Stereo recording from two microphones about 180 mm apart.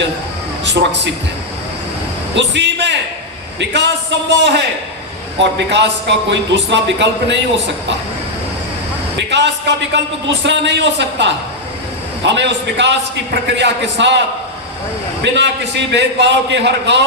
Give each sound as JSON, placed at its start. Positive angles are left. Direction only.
{"t": 0.6, "sound": "a man's voice", "side_deg": -75}
{"t": 2.3, "sound": "a man's voice", "side_deg": -80}
{"t": 9.1, "sound": "a man's voice", "side_deg": -75}
{"t": 12.3, "sound": "a man's voice", "side_deg": -75}
{"t": 15.2, "sound": "a man's voice", "side_deg": -75}